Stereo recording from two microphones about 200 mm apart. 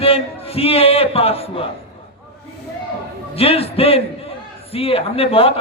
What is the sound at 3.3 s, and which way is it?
A man's voice, 30° left (ahead or behind).